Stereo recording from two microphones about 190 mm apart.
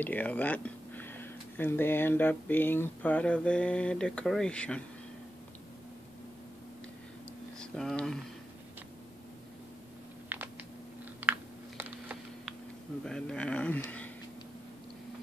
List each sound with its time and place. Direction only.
0.0 s speech: 10° left (ahead or behind)
7.5 s speech: 5° left (ahead or behind)
11.1 s computer keyboard: 10° right (ahead or behind)
13.0 s speech: 5° left (ahead or behind)